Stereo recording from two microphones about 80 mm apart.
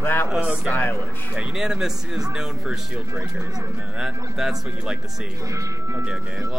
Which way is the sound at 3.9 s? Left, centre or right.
Centre.